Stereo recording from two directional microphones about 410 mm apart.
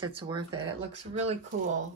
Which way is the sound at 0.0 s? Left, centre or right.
Centre.